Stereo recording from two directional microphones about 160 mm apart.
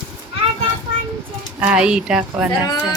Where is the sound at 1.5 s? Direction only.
10° right (ahead or behind).